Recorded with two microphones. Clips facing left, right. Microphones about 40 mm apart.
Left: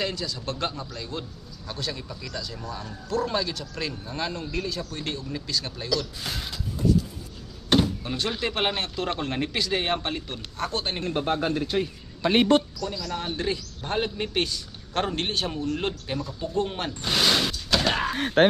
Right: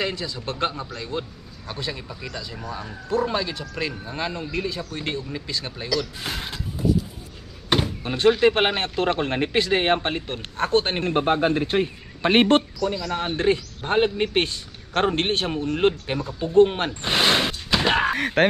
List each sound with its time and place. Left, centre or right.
0.0 s speech: right
6.8 s a sound: centre
7.7 s door: right
8.4 s a man's voice: right